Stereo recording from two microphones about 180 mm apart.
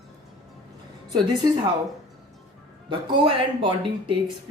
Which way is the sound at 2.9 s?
25° right (ahead or behind).